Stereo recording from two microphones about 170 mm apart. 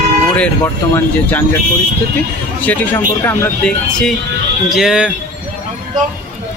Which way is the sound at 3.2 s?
15° left (ahead or behind).